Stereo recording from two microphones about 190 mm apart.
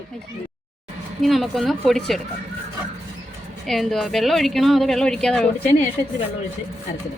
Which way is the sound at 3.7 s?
Centre (ahead or behind).